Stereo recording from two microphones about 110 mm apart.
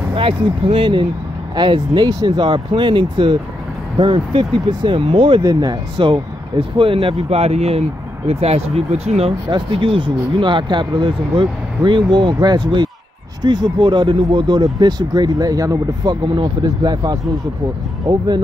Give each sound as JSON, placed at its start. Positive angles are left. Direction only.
{"t": 0.1, "sound": "speech", "side_deg": -55}
{"t": 5.4, "sound": "speech", "side_deg": -35}
{"t": 7.2, "sound": "speech", "side_deg": -75}
{"t": 9.5, "sound": "speech", "side_deg": -50}